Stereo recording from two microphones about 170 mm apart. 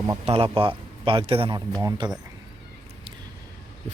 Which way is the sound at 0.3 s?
35° right (ahead or behind).